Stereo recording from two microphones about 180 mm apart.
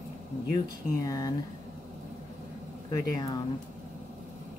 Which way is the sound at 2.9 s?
20° left (ahead or behind).